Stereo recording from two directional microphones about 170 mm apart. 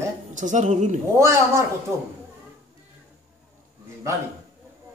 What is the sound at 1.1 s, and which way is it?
Speech, 15° right (ahead or behind).